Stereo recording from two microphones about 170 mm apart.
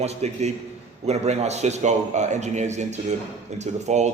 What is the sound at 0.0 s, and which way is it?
A man's voice, 40° right (ahead or behind).